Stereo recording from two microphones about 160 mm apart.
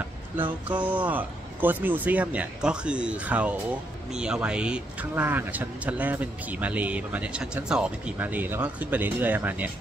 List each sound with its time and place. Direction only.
0.7 s speech: 10° right (ahead or behind)